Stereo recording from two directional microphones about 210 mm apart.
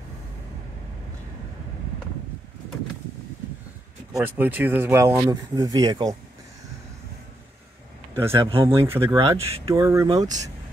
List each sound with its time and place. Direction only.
4.1 s speech: 10° right (ahead or behind)
8.1 s speech: 10° right (ahead or behind)
8.4 s speech: 25° right (ahead or behind)
8.9 s speech: 10° right (ahead or behind)